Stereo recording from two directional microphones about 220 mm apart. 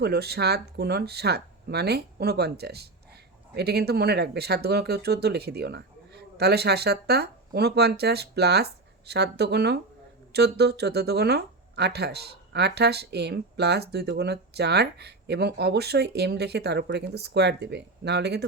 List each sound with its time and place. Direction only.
0.0 s speech: 45° right (ahead or behind)